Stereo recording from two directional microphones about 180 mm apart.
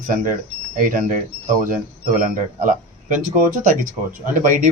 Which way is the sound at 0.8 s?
45° right (ahead or behind).